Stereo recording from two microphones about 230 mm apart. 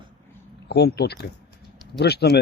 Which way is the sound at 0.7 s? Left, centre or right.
Left.